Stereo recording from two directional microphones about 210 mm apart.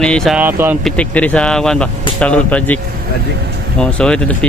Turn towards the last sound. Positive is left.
turn(degrees=5)  # may be behind; listen again after turning